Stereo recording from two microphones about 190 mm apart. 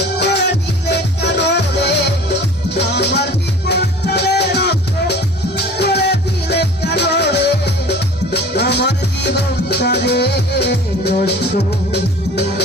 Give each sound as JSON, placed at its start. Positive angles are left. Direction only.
{"t": 0.2, "sound": "music", "side_deg": 65}